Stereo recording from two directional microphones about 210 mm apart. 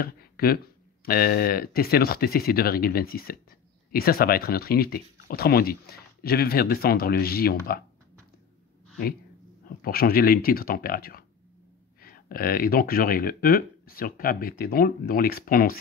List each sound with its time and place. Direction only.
0.0 s a sound: 45° left (ahead or behind)
1.0 s speech: 45° left (ahead or behind)
9.8 s speech: 45° left (ahead or behind)